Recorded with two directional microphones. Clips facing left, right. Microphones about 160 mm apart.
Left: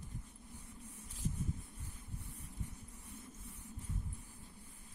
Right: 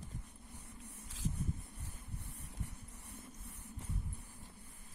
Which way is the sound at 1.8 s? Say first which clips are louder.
Even; 70° right (ahead or behind).